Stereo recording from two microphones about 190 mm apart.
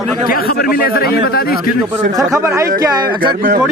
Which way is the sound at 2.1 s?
Centre (ahead or behind).